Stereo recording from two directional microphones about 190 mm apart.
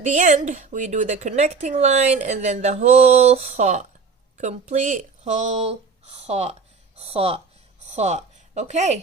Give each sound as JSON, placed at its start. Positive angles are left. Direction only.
{"t": 0.0, "sound": "a woman's voice", "side_deg": -40}